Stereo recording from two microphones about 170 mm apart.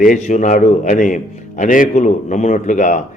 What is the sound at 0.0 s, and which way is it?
A man's voice, 50° left (ahead or behind).